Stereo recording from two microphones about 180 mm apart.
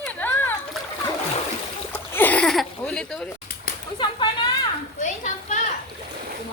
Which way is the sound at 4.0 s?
25° left (ahead or behind).